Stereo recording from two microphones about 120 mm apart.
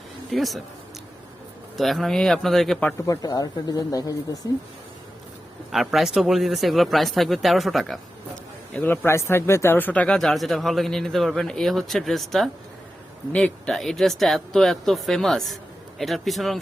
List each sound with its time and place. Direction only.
0.3 s speech: centre (ahead or behind)
1.7 s speech: centre (ahead or behind)
3.1 s speech: 30° left (ahead or behind)
5.7 s speech: centre (ahead or behind)
8.7 s speech: 15° left (ahead or behind); by 16.6 s centre (ahead or behind)